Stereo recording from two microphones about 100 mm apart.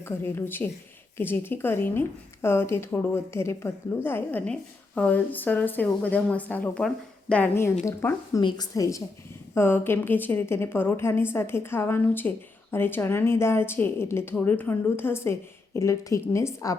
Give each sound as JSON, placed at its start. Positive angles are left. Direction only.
{"t": 0.0, "sound": "speech", "side_deg": 20}
{"t": 7.5, "sound": "speech", "side_deg": 25}
{"t": 8.4, "sound": "a woman's voice", "side_deg": 45}
{"t": 9.6, "sound": "speech", "side_deg": 20}